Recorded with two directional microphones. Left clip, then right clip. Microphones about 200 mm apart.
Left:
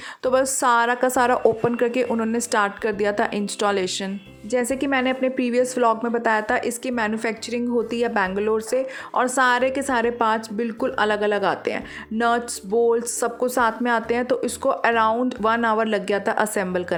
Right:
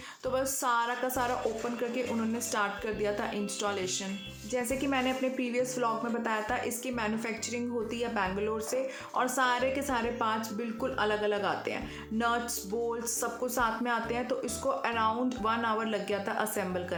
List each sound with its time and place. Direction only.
0.2 s a woman's voice: 45° left (ahead or behind)